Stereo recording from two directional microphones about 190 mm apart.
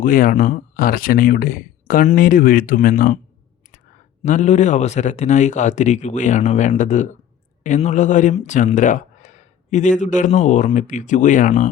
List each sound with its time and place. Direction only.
0.0 s speech: 45° left (ahead or behind)
4.2 s speech: 40° left (ahead or behind)